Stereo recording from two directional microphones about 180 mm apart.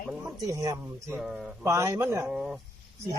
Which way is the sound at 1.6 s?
15° right (ahead or behind).